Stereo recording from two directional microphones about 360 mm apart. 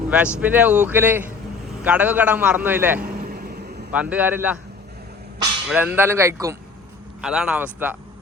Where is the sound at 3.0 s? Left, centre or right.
Right.